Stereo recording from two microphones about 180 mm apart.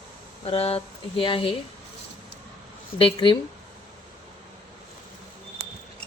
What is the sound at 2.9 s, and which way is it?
Speech, 30° left (ahead or behind).